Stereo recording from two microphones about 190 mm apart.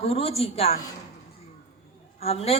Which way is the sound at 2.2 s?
35° left (ahead or behind).